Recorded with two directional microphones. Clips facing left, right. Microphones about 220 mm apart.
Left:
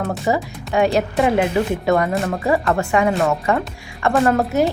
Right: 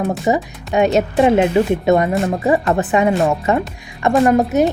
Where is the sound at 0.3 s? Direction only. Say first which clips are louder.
Right 3 dB; 20° right (ahead or behind).